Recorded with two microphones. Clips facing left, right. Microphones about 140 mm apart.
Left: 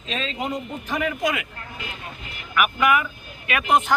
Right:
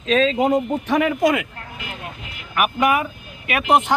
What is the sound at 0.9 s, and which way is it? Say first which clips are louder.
Speech: right 6 dB; 75° right (ahead or behind).